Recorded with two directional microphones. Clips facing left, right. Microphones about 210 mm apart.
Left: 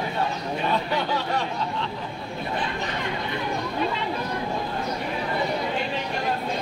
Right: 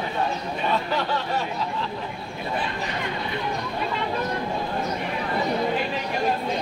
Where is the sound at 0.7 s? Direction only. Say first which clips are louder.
Even; centre (ahead or behind).